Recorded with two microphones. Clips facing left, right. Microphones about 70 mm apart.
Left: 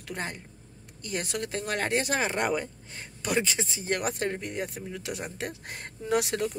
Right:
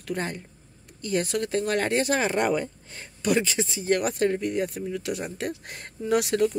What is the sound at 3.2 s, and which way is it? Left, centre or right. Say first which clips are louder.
Speech: right 4 dB; left.